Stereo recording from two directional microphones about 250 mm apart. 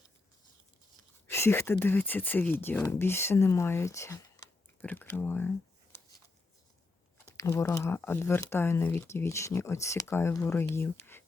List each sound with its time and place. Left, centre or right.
1.3 s speech: centre
7.3 s speech: centre